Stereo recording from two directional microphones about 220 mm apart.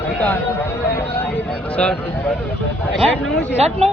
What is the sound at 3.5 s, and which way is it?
Speech, 30° right (ahead or behind).